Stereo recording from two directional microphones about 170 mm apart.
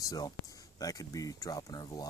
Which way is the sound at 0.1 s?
20° left (ahead or behind).